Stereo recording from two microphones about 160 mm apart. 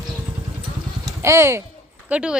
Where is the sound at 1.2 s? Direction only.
15° right (ahead or behind).